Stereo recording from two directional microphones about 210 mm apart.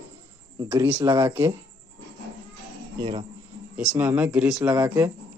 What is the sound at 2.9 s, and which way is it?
Speech, 20° right (ahead or behind).